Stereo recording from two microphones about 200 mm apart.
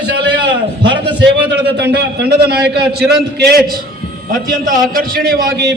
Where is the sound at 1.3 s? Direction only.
55° right (ahead or behind).